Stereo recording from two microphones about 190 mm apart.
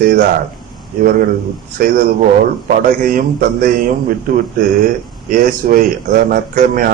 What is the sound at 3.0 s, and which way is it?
Speech, 45° right (ahead or behind).